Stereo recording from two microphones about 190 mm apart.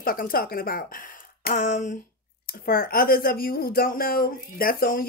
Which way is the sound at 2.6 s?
50° left (ahead or behind).